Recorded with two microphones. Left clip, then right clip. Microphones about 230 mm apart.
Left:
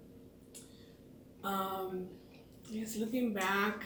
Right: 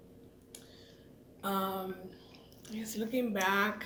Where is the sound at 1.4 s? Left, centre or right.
Right.